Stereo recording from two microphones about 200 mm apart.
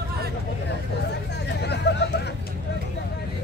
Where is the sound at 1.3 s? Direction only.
55° left (ahead or behind).